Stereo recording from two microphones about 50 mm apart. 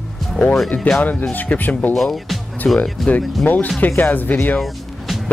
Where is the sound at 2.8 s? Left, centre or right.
Left.